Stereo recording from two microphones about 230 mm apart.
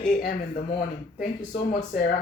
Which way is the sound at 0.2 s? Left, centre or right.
Left.